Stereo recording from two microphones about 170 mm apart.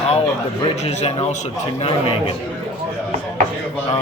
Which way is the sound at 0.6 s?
40° left (ahead or behind).